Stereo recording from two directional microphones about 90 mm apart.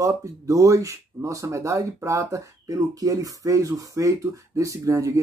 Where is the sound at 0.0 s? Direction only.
35° right (ahead or behind).